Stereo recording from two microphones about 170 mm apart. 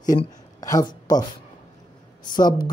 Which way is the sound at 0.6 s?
20° left (ahead or behind).